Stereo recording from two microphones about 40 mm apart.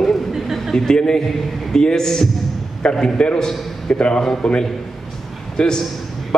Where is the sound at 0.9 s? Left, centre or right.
Centre.